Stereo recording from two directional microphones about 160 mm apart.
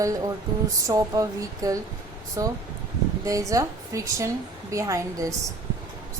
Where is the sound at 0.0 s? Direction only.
20° right (ahead or behind).